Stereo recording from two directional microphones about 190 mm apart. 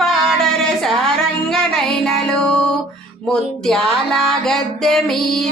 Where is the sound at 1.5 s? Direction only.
5° left (ahead or behind).